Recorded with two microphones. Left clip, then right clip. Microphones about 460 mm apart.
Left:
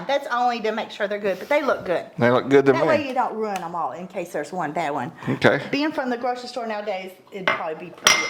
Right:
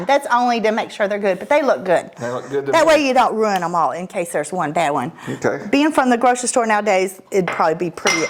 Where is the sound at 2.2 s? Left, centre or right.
Left.